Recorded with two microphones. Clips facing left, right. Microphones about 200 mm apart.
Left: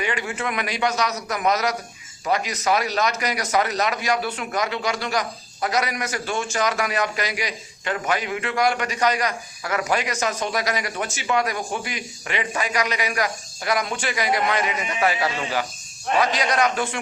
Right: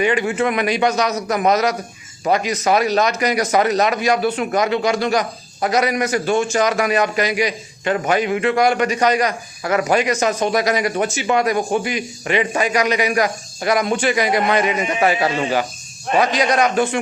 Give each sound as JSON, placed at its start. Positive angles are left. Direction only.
{"t": 0.0, "sound": "a man's voice", "side_deg": -20}